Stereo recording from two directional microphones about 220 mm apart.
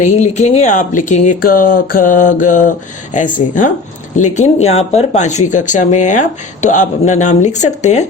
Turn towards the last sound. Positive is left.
turn(degrees=30)  # may be behind; listen again after turning